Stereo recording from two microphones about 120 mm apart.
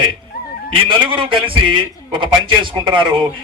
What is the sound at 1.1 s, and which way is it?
A man's voice, 45° right (ahead or behind).